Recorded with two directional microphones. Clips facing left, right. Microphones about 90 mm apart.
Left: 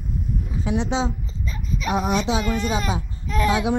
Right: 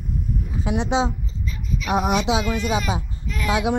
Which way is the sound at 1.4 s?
35° left (ahead or behind).